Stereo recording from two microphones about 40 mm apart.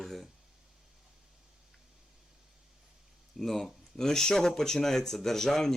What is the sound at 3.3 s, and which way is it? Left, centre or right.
Speech, centre.